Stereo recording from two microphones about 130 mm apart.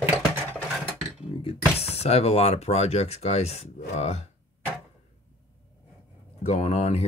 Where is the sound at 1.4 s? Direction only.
50° left (ahead or behind).